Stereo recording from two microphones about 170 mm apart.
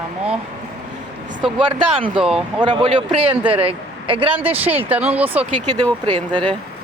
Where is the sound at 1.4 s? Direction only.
30° right (ahead or behind).